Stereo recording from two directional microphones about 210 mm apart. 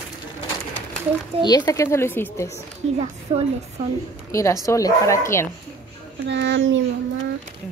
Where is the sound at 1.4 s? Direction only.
20° left (ahead or behind).